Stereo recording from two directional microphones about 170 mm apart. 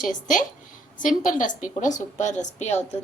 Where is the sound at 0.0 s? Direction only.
50° left (ahead or behind).